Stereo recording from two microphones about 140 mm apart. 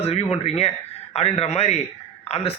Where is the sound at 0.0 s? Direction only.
50° left (ahead or behind).